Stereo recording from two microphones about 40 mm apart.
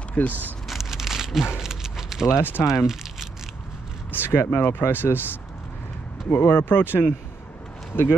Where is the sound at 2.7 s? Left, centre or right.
Centre.